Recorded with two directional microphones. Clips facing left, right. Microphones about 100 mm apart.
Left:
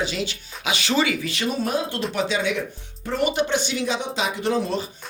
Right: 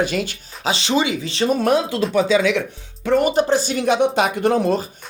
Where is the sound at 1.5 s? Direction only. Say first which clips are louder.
Right 8 dB; 70° right (ahead or behind).